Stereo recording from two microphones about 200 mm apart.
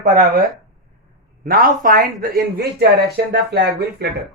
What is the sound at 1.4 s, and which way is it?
Speech, 45° right (ahead or behind).